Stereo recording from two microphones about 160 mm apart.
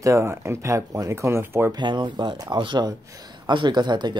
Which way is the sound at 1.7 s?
30° right (ahead or behind).